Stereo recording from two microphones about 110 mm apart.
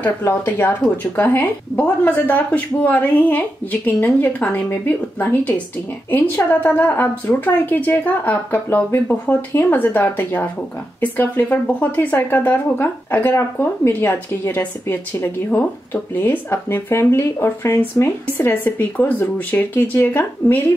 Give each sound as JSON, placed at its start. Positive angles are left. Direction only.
{"t": 0.0, "sound": "a woman's voice", "side_deg": 20}